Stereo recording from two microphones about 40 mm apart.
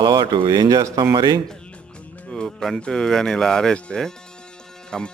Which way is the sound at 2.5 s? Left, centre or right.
Centre.